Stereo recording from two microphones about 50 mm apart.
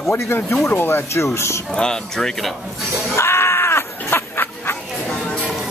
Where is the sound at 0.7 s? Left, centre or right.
Left.